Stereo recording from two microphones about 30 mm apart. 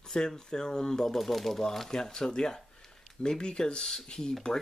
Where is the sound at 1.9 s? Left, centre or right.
Centre.